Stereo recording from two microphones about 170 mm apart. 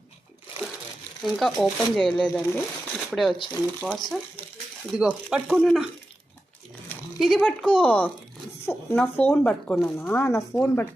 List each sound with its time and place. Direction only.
1.2 s speech: centre (ahead or behind)
3.3 s speech: 25° left (ahead or behind)
3.8 s speech: centre (ahead or behind)
7.2 s speech: centre (ahead or behind)
10.2 s speech: 15° left (ahead or behind)